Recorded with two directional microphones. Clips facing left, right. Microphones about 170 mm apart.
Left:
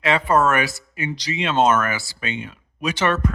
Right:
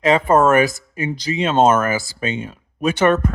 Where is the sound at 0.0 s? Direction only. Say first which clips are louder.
Right 4 dB; 45° right (ahead or behind).